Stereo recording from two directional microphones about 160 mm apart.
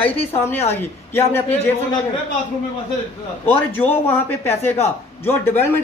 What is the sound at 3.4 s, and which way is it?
Speech, 10° left (ahead or behind).